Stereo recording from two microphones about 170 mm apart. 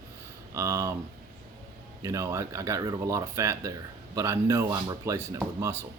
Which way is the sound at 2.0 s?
20° right (ahead or behind).